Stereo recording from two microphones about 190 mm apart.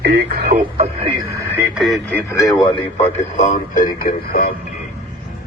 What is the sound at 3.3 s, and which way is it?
A man's voice, 40° left (ahead or behind).